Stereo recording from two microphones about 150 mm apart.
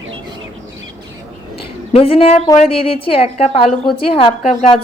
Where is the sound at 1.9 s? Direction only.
40° left (ahead or behind).